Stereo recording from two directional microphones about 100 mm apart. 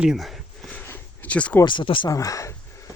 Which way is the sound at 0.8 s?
15° left (ahead or behind).